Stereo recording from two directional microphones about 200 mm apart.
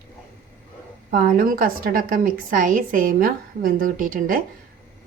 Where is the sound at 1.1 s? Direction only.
45° right (ahead or behind).